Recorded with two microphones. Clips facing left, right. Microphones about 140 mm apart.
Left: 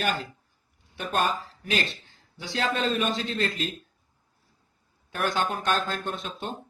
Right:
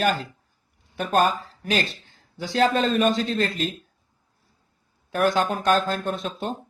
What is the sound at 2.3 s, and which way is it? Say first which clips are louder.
Speech: right 7 dB; 40° right (ahead or behind).